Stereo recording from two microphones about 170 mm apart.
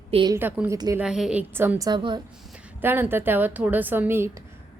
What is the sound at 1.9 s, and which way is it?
Speech, 25° right (ahead or behind).